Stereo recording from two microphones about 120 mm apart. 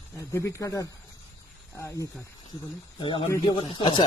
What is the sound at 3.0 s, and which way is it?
A man's voice, 45° left (ahead or behind).